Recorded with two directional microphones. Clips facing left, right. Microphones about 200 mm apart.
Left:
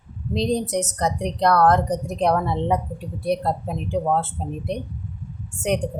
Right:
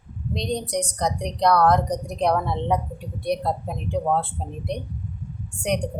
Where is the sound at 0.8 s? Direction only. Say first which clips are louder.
Left 2 dB; 5° left (ahead or behind).